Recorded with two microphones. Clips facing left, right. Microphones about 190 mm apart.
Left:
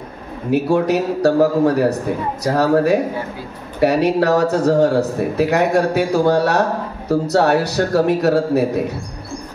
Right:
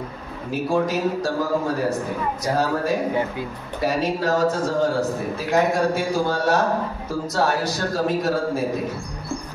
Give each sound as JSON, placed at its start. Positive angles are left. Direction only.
{"t": 0.5, "sound": "a man's voice", "side_deg": 70}